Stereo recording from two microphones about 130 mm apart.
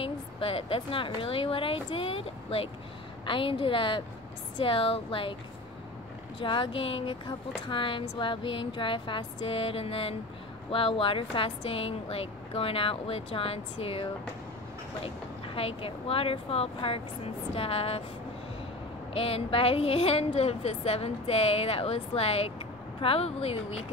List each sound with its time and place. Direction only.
0.0 s speech: 45° left (ahead or behind)
6.4 s speech: 40° left (ahead or behind)
15.0 s speech: 45° left (ahead or behind)
19.1 s speech: 45° left (ahead or behind)